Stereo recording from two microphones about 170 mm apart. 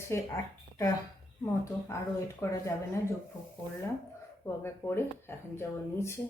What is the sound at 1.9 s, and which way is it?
A woman's voice, 15° left (ahead or behind).